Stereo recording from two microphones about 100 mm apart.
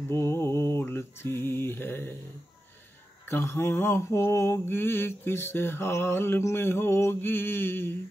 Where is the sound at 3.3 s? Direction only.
25° left (ahead or behind).